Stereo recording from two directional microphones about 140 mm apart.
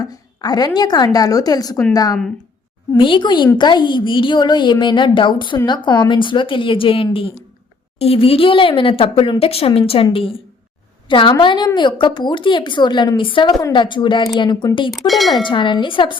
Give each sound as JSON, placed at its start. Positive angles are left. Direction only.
{"t": 0.0, "sound": "a woman's voice", "side_deg": 30}
{"t": 14.8, "sound": "speech", "side_deg": 0}
{"t": 15.3, "sound": "a woman's voice", "side_deg": 35}